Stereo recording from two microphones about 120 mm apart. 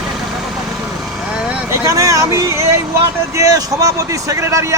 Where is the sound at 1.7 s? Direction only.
25° right (ahead or behind).